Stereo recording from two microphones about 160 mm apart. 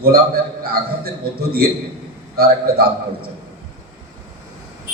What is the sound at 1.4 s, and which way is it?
A man's voice, 75° right (ahead or behind).